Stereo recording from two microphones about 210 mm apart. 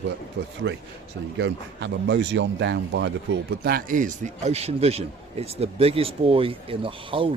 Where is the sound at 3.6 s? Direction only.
45° right (ahead or behind).